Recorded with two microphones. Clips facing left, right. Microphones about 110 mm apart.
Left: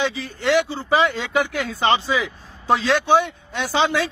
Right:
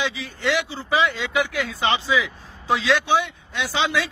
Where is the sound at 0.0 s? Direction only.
45° left (ahead or behind).